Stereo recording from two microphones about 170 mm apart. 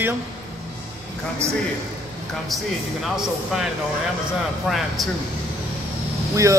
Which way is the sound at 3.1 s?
5° right (ahead or behind).